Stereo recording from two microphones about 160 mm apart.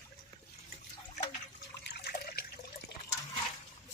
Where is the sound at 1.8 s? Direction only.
90° left.